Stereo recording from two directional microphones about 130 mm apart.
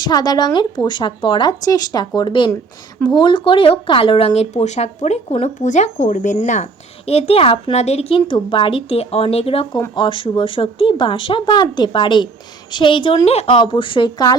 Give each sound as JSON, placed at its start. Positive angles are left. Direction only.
{"t": 0.0, "sound": "speech", "side_deg": 30}
{"t": 8.3, "sound": "speech", "side_deg": 40}